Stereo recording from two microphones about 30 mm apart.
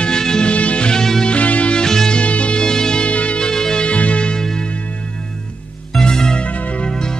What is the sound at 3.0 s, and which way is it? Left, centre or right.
Music, left.